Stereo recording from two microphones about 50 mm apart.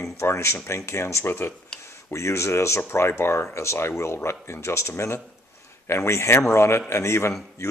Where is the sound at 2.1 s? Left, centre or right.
Left.